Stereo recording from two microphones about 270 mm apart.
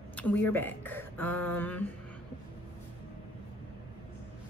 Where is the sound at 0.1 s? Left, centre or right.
Centre.